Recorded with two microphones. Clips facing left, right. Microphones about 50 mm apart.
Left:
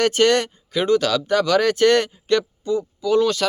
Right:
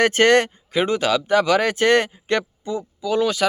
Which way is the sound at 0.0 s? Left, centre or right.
Right.